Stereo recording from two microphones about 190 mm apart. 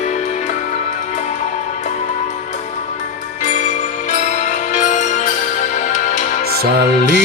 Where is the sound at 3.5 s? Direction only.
40° left (ahead or behind).